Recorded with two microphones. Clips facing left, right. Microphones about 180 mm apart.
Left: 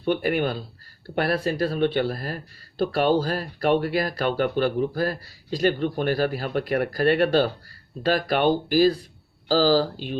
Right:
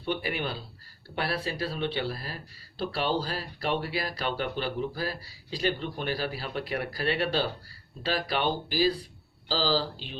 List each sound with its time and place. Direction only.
0.0 s speech: 50° left (ahead or behind)